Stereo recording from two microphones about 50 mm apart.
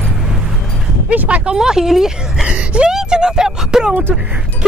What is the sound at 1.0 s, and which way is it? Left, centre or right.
Speech, right.